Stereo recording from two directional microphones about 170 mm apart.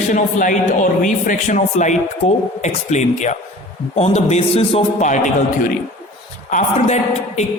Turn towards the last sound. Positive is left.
turn(degrees=40)  # may be behind; listen again after turning